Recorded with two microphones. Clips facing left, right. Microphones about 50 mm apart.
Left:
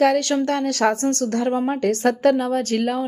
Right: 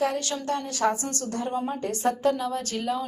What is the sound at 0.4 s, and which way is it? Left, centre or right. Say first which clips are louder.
A woman's voice: left 6 dB; left.